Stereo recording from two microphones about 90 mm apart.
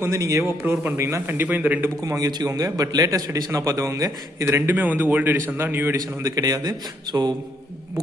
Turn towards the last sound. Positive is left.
turn(degrees=-50)  # may be behind; listen again after turning